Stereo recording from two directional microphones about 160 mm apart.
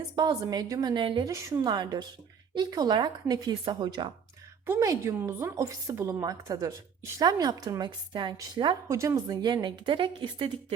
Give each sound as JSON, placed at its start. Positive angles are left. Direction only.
{"t": 0.2, "sound": "a woman's voice", "side_deg": -25}
{"t": 1.3, "sound": "a woman's voice", "side_deg": -20}